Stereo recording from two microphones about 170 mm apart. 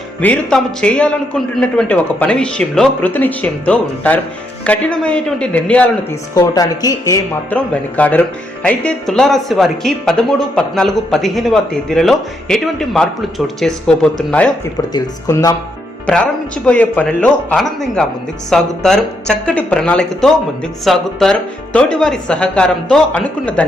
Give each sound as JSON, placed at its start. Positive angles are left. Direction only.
{"t": 0.2, "sound": "a man's voice", "side_deg": 5}
{"t": 6.3, "sound": "speech", "side_deg": 20}
{"t": 7.5, "sound": "speech", "side_deg": 10}
{"t": 14.9, "sound": "speech", "side_deg": 20}
{"t": 16.0, "sound": "a man's voice", "side_deg": 5}